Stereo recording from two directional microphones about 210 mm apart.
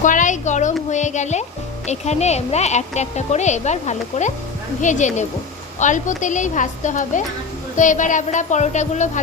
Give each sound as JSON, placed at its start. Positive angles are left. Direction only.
{"t": 0.0, "sound": "speech", "side_deg": 35}